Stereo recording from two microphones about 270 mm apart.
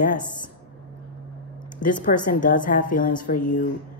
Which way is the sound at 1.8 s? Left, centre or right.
Left.